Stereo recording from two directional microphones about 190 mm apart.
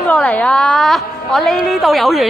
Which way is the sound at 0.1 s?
5° left (ahead or behind).